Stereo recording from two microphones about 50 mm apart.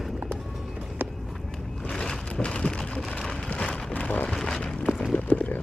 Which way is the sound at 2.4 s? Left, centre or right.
Left.